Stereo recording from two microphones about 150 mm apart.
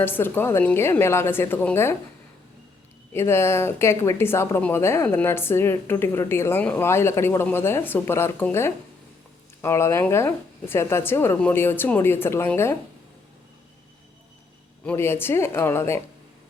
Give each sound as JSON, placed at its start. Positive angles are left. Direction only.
{"t": 0.0, "sound": "speech", "side_deg": 15}
{"t": 3.1, "sound": "speech", "side_deg": 15}
{"t": 14.8, "sound": "speech", "side_deg": 15}